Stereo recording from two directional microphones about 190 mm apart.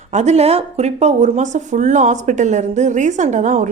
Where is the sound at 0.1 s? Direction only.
35° right (ahead or behind).